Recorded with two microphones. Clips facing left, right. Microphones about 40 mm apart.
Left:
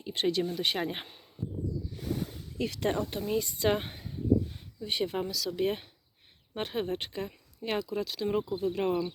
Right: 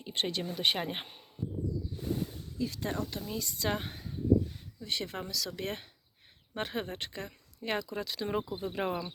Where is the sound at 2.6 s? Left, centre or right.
Left.